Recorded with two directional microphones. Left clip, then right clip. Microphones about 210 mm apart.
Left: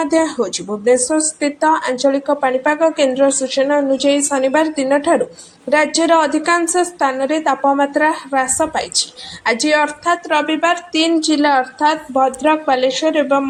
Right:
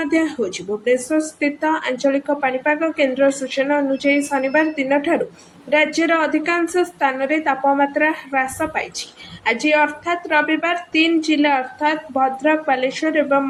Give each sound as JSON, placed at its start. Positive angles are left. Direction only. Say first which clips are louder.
{"t": 0.0, "sound": "a woman's voice", "louder": "left 4 dB", "side_deg": 20}
{"t": 11.2, "sound": "a woman's voice", "louder": "left 2 dB", "side_deg": -5}
{"t": 11.4, "sound": "a woman's voice", "louder": "left 4 dB", "side_deg": 20}